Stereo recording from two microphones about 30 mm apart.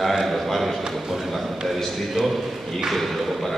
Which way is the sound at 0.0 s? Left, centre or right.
Centre.